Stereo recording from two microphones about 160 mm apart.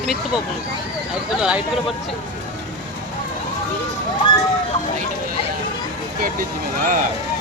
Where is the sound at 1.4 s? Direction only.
5° right (ahead or behind).